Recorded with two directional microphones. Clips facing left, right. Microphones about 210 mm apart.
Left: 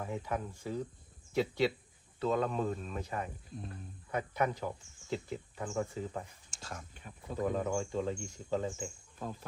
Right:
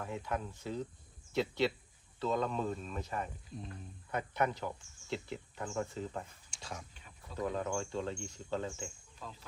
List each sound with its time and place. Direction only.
0.0 s speech: 10° left (ahead or behind)
7.3 s speech: 15° left (ahead or behind)
9.1 s speech: 50° left (ahead or behind)